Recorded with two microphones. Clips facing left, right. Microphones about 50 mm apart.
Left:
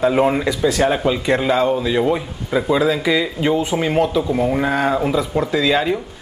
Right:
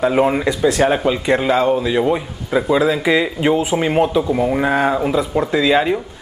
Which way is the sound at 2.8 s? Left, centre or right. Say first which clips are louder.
Right 2 dB; centre.